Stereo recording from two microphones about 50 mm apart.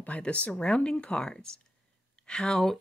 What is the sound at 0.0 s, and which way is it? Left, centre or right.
Speech, left.